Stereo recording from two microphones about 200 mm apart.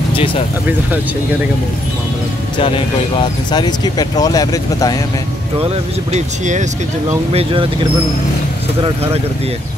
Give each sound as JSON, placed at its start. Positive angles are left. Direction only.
{"t": 2.5, "sound": "speech", "side_deg": 25}
{"t": 6.1, "sound": "speech", "side_deg": -35}
{"t": 7.3, "sound": "speech", "side_deg": -25}